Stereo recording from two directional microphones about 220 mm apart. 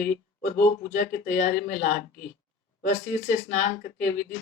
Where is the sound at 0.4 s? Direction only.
35° left (ahead or behind).